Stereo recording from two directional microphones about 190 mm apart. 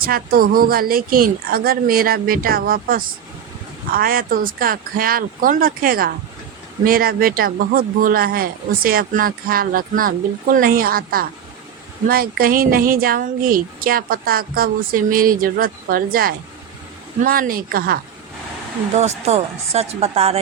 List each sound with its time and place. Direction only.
0.0 s speech: 50° right (ahead or behind)
18.9 s speech: 35° right (ahead or behind)